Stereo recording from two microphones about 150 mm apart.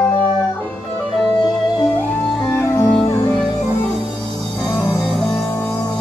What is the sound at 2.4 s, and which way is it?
Music, 20° left (ahead or behind).